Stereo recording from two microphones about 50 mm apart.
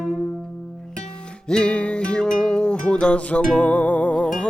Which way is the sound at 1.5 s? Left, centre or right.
Centre.